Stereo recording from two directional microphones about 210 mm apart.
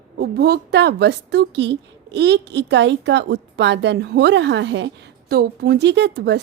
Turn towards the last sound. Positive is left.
turn(degrees=-55)  # may be behind; listen again after turning